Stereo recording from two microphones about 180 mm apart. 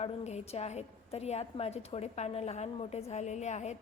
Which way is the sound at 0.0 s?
35° left (ahead or behind).